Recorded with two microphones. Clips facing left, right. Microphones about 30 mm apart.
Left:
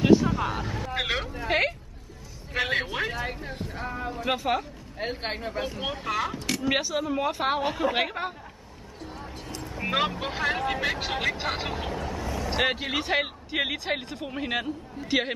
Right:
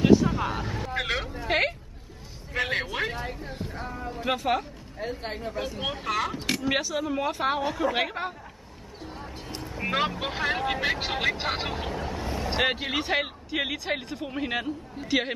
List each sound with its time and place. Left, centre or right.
0.0 s speech: centre
4.9 s speech: left
5.4 s a woman's voice: left
5.8 s speech: centre
6.3 s speech: centre
6.6 s speech: centre
7.6 s a woman's voice: centre
7.9 s speech: centre
9.0 s music: centre
9.6 s speech: centre
12.2 s vehicle: right
12.5 s speech: centre